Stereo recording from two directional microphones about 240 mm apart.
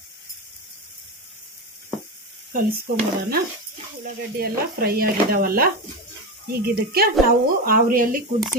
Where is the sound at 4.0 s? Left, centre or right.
Right.